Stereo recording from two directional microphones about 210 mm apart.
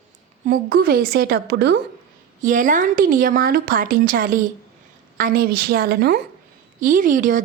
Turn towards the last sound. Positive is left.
turn(degrees=-40)  # may be behind; listen again after turning